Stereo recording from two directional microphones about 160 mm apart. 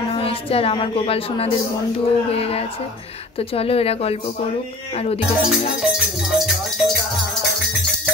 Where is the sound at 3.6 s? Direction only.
40° left (ahead or behind).